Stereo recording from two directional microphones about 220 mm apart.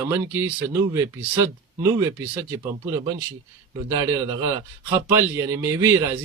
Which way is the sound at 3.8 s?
15° right (ahead or behind).